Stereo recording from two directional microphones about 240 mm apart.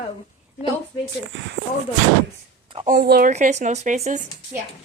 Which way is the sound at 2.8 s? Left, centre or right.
Right.